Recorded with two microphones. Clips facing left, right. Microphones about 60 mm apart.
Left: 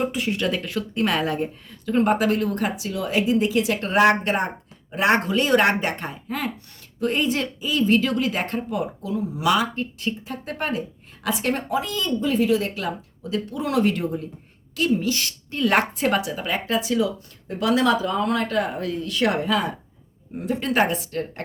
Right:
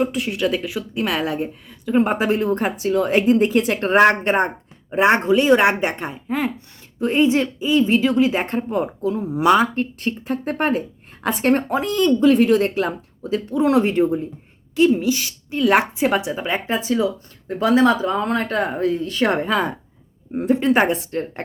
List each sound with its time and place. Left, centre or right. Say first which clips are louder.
0.0 s speech: right 3 dB; centre; by 12.7 s right
12.7 s speech: right 6 dB; right
14.8 s a woman's voice: right 6 dB; centre